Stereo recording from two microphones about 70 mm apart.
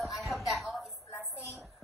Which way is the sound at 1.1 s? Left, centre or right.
Left.